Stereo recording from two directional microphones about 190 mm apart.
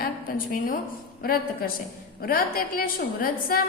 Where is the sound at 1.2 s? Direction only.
50° left (ahead or behind).